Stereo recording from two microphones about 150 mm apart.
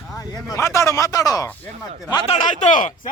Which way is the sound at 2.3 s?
55° left (ahead or behind).